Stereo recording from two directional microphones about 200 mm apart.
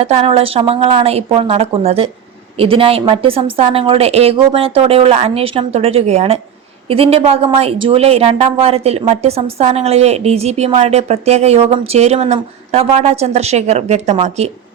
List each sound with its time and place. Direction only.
0.0 s a woman's voice: 30° right (ahead or behind)